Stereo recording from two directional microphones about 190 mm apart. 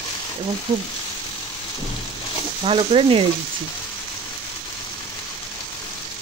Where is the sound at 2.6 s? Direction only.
25° right (ahead or behind).